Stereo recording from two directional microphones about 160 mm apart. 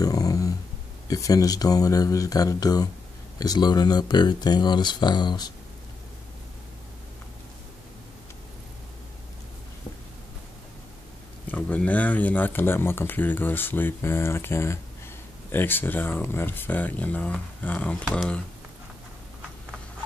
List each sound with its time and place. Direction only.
0.0 s a sound: 20° left (ahead or behind)
1.0 s speech: 20° left (ahead or behind)
11.4 s speech: 10° left (ahead or behind)